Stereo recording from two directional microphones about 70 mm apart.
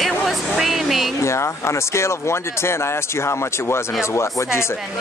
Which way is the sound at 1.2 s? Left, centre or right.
Left.